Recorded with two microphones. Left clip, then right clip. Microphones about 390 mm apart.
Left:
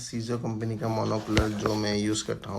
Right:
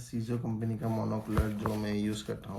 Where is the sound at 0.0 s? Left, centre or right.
Left.